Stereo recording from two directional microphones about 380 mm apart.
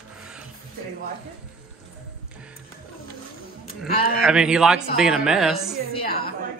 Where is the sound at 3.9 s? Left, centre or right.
Left.